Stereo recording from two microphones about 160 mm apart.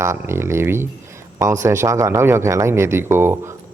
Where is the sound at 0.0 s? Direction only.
15° right (ahead or behind).